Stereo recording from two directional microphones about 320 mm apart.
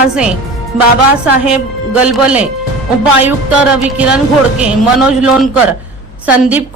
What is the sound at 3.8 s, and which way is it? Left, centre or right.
A woman's voice, centre.